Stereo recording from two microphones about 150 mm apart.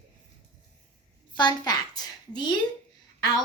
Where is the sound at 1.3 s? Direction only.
30° left (ahead or behind).